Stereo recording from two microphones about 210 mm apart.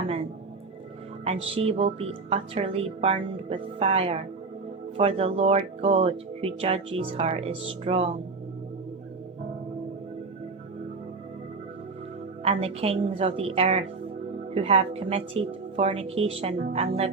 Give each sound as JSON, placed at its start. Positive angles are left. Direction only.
{"t": 1.5, "sound": "speech", "side_deg": -30}
{"t": 12.4, "sound": "speech", "side_deg": -30}